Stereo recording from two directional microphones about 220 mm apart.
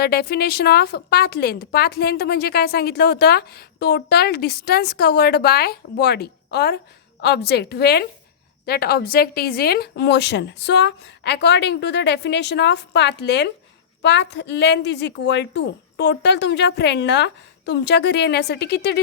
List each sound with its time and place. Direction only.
0.0 s a woman's voice: 45° left (ahead or behind)